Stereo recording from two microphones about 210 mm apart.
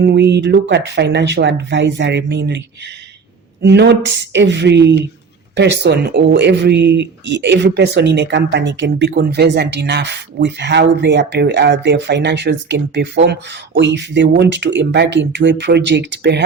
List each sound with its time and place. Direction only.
0.0 s speech: 50° right (ahead or behind)
3.6 s speech: 55° right (ahead or behind)